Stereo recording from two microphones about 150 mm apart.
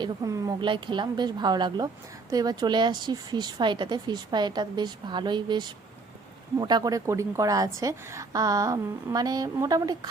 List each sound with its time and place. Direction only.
0.0 s a woman's voice: 20° right (ahead or behind)